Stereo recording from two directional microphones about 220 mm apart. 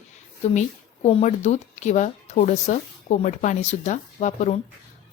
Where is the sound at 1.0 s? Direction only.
30° left (ahead or behind).